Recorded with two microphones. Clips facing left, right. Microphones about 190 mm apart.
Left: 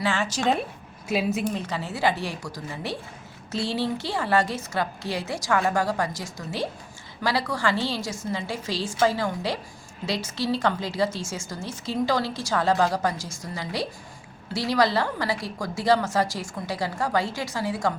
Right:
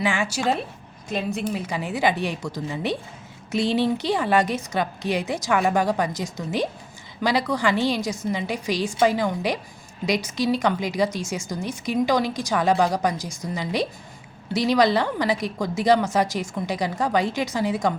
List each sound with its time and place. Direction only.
0.0 s a woman's voice: 10° right (ahead or behind)
1.0 s a woman's voice: 5° left (ahead or behind); by 17.9 s 20° right (ahead or behind)